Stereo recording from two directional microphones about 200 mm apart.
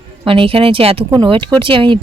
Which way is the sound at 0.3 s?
25° right (ahead or behind).